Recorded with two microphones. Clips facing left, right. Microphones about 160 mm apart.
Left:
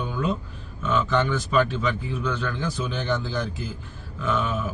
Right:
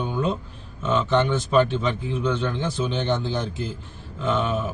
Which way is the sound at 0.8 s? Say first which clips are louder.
Right 2 dB; 25° right (ahead or behind).